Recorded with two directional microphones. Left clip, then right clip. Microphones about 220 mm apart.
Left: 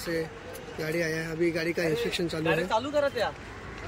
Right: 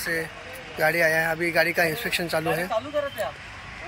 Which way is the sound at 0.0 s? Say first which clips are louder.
Right 4 dB; 10° left (ahead or behind).